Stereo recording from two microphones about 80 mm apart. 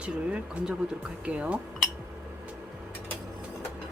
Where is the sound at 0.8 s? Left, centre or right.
Centre.